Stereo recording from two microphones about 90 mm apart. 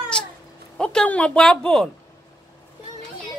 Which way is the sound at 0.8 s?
10° left (ahead or behind).